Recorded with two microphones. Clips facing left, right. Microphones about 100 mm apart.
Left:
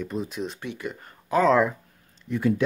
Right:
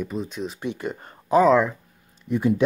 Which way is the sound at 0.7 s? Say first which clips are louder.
Right 4 dB; 35° right (ahead or behind).